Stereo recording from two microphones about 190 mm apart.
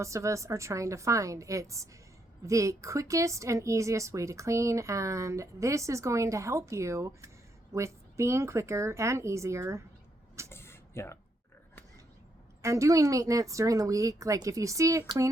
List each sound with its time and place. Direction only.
0.0 s speech: 15° right (ahead or behind)
10.5 s a sound: 15° left (ahead or behind)
12.6 s speech: 15° right (ahead or behind)